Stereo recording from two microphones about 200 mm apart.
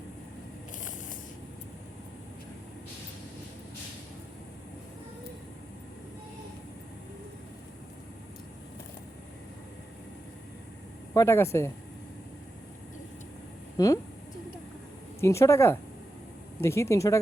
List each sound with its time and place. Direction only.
11.1 s speech: 15° left (ahead or behind)
13.7 s speech: 15° left (ahead or behind)
15.2 s speech: 15° left (ahead or behind)